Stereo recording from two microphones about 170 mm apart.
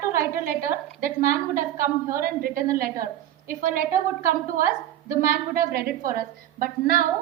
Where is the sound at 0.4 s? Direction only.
55° right (ahead or behind).